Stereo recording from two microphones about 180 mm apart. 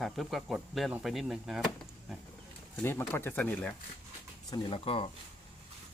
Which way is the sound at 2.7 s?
10° left (ahead or behind).